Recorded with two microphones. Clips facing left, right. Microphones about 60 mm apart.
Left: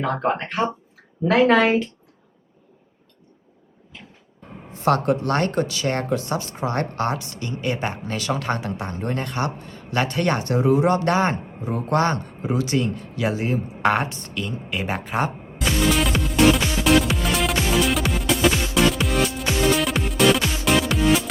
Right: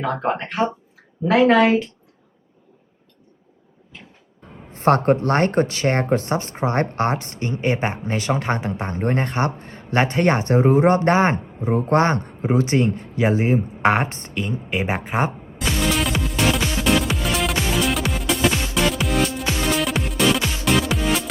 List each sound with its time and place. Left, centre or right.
0.0 s speech: centre
4.7 s a woman's voice: right
15.5 s music: centre